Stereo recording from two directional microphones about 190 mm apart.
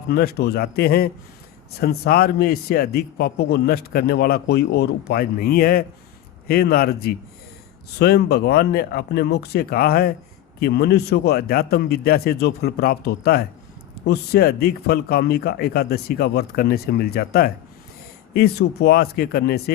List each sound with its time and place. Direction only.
0.1 s a man's voice: 55° left (ahead or behind)